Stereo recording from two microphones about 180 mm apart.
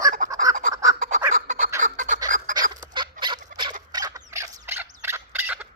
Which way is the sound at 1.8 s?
50° right (ahead or behind).